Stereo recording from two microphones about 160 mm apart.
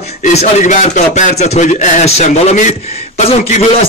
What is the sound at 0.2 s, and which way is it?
A man's voice, 45° left (ahead or behind).